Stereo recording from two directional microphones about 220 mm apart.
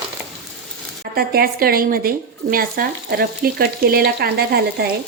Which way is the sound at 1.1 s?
45° right (ahead or behind).